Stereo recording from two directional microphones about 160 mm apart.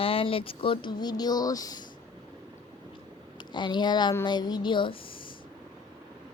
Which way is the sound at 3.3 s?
30° left (ahead or behind).